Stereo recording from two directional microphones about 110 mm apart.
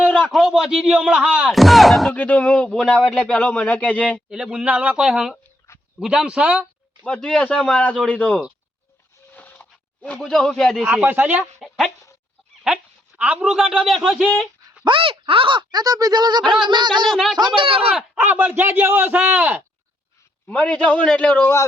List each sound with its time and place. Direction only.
0.3 s speech: 5° right (ahead or behind)
2.1 s a man's voice: 15° left (ahead or behind)
4.3 s speech: 10° right (ahead or behind)
7.0 s a man's voice: 10° left (ahead or behind)
9.3 s a sound: 15° left (ahead or behind)
10.2 s speech: 5° left (ahead or behind)
10.8 s speech: 15° right (ahead or behind)
12.6 s a man's voice: 10° right (ahead or behind)
14.8 s speech: 50° right (ahead or behind)
17.2 s speech: centre (ahead or behind)
17.4 s speech: 50° right (ahead or behind)
17.9 s speech: 10° right (ahead or behind)
20.5 s a man's voice: 10° left (ahead or behind)